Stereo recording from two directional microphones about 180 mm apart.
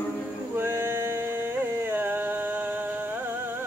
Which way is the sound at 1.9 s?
10° right (ahead or behind).